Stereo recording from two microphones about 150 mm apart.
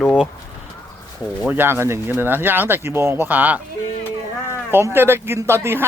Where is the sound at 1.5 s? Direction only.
15° right (ahead or behind).